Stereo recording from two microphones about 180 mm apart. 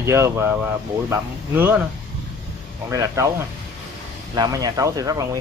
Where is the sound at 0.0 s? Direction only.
15° right (ahead or behind).